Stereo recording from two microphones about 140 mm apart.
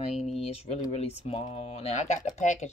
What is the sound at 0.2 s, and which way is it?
Speech, 50° left (ahead or behind).